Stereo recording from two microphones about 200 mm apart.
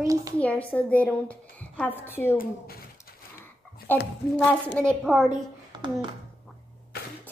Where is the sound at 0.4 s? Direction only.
5° left (ahead or behind).